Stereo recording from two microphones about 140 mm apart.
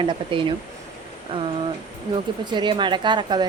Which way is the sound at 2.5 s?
35° right (ahead or behind).